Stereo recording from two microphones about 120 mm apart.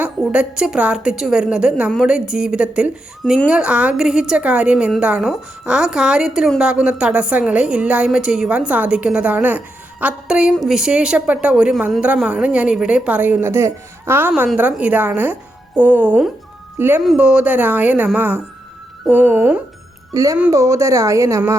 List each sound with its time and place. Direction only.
0.0 s a woman's voice: 10° right (ahead or behind)
17.0 s speech: 5° right (ahead or behind)
20.1 s speech: 30° right (ahead or behind)